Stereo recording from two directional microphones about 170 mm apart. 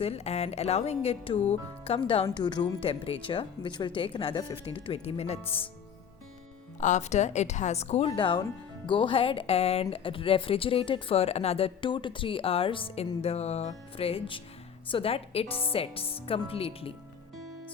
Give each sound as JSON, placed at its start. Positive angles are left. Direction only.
{"t": 0.0, "sound": "a woman's voice", "side_deg": 35}
{"t": 6.7, "sound": "a woman's voice", "side_deg": 45}